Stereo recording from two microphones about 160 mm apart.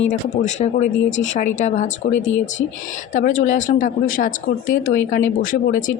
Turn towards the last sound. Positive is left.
turn(degrees=55)  # may be behind; listen again after turning